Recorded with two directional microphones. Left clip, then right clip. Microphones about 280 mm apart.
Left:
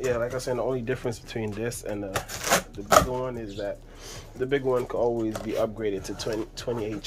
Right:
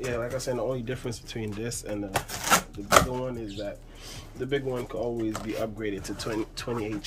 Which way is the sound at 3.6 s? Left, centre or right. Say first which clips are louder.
Left 4 dB; centre.